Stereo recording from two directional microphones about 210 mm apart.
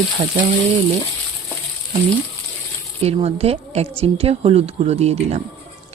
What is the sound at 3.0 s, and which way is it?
A woman's voice, 30° right (ahead or behind).